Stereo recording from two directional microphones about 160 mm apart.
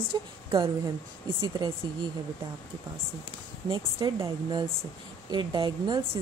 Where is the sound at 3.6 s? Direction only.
30° right (ahead or behind).